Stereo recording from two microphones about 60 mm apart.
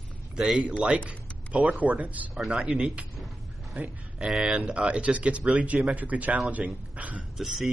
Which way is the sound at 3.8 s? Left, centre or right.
Right.